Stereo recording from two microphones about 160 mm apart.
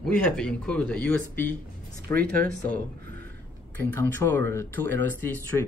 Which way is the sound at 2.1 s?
60° right (ahead or behind).